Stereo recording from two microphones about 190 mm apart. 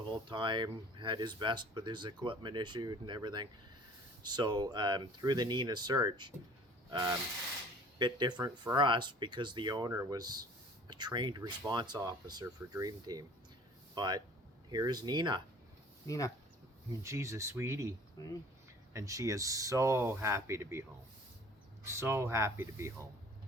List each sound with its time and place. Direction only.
0.1 s speech: 25° right (ahead or behind)
16.0 s speech: 15° left (ahead or behind)
17.0 s speech: 15° right (ahead or behind)
18.2 s speech: 20° left (ahead or behind)
18.9 s speech: 15° right (ahead or behind)
21.8 s speech: 15° right (ahead or behind)